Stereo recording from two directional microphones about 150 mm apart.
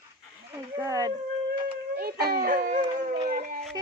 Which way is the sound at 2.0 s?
85° right.